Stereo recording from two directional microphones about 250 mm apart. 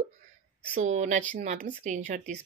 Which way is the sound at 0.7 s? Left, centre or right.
Right.